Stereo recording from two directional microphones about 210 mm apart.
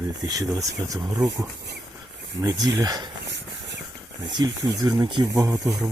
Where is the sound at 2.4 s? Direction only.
15° right (ahead or behind).